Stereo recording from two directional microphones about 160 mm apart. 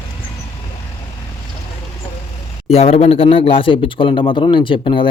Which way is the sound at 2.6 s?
40° left (ahead or behind).